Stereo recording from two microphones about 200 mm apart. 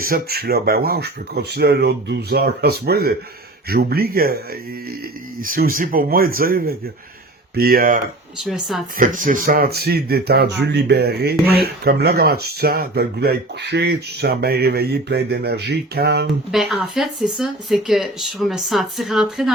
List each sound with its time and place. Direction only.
0.0 s speech: 50° right (ahead or behind)
5.4 s speech: 45° right (ahead or behind)
8.4 s speech: centre (ahead or behind)
9.0 s speech: 40° right (ahead or behind)
16.5 s speech: centre (ahead or behind)